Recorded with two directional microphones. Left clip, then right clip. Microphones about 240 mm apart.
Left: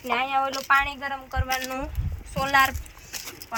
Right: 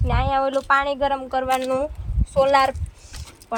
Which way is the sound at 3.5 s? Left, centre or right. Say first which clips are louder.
Right 5 dB; right.